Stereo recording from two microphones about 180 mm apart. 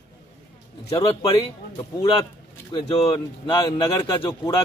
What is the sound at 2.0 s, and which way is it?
Speech, 25° left (ahead or behind).